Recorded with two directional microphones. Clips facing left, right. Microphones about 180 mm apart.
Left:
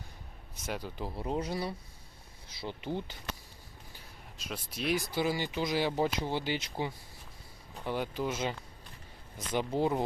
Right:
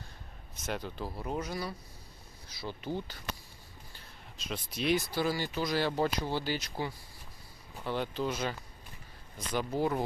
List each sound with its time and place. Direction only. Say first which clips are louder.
0.5 s speech: right 1 dB; 10° left (ahead or behind)
1.0 s speech: left 4 dB; 25° left (ahead or behind)
4.4 s speech: right 2 dB; 5° left (ahead or behind)
5.0 s speech: even; 20° left (ahead or behind)
8.3 s speech: even; 20° left (ahead or behind)